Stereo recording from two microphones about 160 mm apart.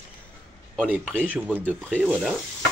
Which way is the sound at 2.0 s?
10° right (ahead or behind).